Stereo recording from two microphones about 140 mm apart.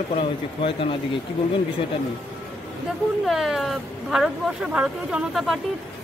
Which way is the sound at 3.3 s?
Centre (ahead or behind).